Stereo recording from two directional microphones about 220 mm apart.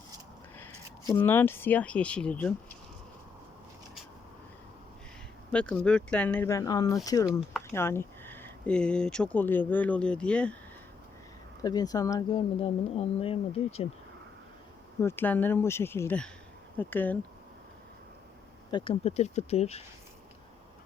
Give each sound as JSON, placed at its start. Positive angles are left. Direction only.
{"t": 1.1, "sound": "speech", "side_deg": 10}
{"t": 5.5, "sound": "speech", "side_deg": 5}
{"t": 11.6, "sound": "speech", "side_deg": 15}
{"t": 15.0, "sound": "speech", "side_deg": 10}
{"t": 18.7, "sound": "speech", "side_deg": 25}